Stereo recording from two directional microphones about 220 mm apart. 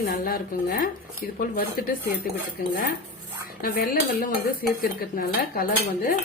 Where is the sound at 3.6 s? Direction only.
40° left (ahead or behind).